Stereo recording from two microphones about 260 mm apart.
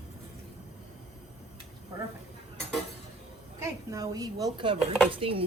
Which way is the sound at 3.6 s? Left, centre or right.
Centre.